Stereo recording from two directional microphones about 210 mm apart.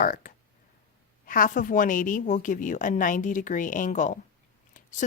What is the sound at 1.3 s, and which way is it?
Speech, 40° left (ahead or behind).